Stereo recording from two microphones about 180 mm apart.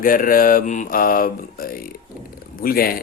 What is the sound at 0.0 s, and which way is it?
Speech, 50° left (ahead or behind).